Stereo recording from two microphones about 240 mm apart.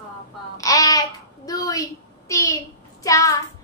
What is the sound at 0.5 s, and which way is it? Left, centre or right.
A child's voice, centre.